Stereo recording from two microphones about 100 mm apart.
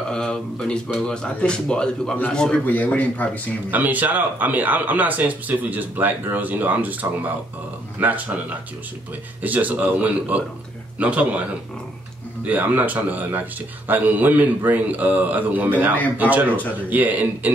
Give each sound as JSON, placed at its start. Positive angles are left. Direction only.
{"t": 0.1, "sound": "a sound", "side_deg": 5}
{"t": 1.0, "sound": "speech", "side_deg": 10}
{"t": 3.7, "sound": "speech", "side_deg": -15}
{"t": 12.4, "sound": "speech", "side_deg": -15}